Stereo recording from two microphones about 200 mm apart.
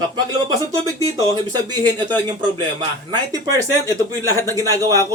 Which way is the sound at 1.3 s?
20° right (ahead or behind).